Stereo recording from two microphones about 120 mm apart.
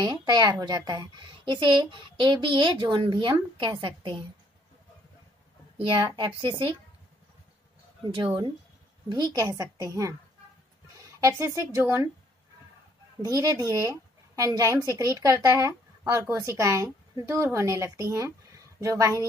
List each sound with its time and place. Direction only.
0.0 s a woman's voice: 35° right (ahead or behind)
5.8 s a woman's voice: 45° right (ahead or behind)
8.0 s speech: 45° right (ahead or behind); by 11.8 s 25° right (ahead or behind)
13.2 s speech: 30° right (ahead or behind)